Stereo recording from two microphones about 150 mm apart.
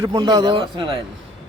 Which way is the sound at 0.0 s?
25° right (ahead or behind).